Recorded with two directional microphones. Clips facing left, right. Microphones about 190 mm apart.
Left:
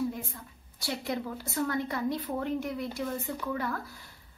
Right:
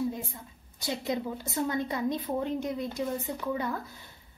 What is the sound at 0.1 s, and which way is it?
A woman's voice, 20° right (ahead or behind).